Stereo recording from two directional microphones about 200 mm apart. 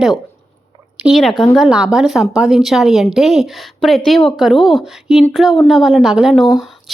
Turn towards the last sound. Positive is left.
turn(degrees=0)  # may be behind; listen again after turning